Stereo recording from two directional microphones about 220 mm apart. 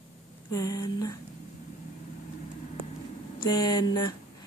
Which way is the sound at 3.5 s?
15° left (ahead or behind).